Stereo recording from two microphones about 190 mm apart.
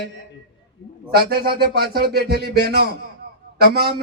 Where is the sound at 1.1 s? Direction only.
55° right (ahead or behind).